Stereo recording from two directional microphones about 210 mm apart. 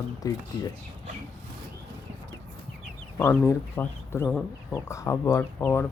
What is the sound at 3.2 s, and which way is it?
Speech, 10° left (ahead or behind).